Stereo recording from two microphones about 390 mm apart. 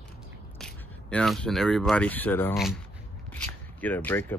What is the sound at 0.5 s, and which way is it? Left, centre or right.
Speech, centre.